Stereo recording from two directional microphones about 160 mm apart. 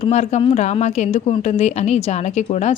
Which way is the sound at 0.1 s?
45° left (ahead or behind).